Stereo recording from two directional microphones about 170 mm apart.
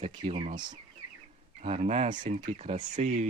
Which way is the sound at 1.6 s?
40° right (ahead or behind).